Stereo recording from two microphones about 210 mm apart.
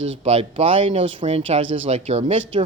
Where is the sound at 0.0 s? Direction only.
30° right (ahead or behind).